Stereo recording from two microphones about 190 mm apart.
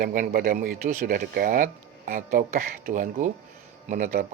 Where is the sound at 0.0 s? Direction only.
45° right (ahead or behind).